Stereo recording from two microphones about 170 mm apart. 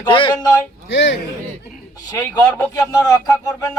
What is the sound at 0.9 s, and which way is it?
Speech, 90° left.